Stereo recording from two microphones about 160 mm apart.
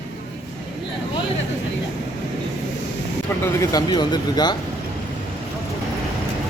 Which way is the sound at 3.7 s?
25° left (ahead or behind).